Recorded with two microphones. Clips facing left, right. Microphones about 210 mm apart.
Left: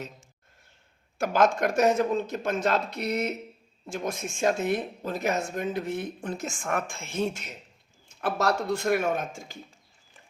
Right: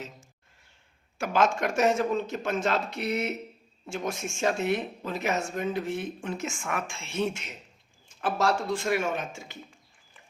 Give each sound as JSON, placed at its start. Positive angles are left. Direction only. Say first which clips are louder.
{"t": 1.2, "sound": "speech", "louder": "left 2 dB", "side_deg": 50}
{"t": 4.4, "sound": "speech", "louder": "left 1 dB", "side_deg": 50}
{"t": 6.2, "sound": "speech", "louder": "left 1 dB", "side_deg": 40}
{"t": 6.7, "sound": "speech", "louder": "left 1 dB", "side_deg": 55}
{"t": 7.3, "sound": "a man's voice", "louder": "even", "side_deg": 35}
{"t": 8.2, "sound": "speech", "louder": "even", "side_deg": 60}